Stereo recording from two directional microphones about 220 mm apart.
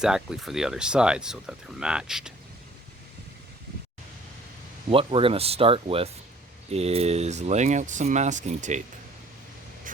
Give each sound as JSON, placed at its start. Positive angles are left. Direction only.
{"t": 0.0, "sound": "speech", "side_deg": -5}
{"t": 4.9, "sound": "speech", "side_deg": -25}